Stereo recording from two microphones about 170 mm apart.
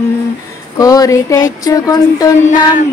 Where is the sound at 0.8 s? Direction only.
20° left (ahead or behind).